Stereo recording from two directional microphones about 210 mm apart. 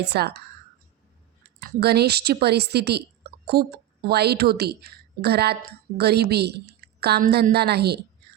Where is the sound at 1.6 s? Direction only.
50° right (ahead or behind).